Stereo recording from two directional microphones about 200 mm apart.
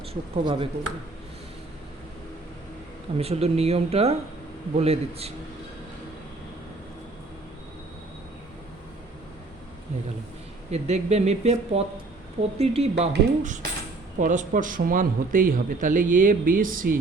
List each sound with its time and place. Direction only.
0.1 s speech: 25° right (ahead or behind)
3.2 s speech: 30° right (ahead or behind)
10.7 s a man's voice: 35° right (ahead or behind)